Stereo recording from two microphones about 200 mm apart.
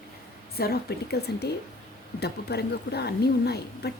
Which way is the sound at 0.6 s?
50° left (ahead or behind).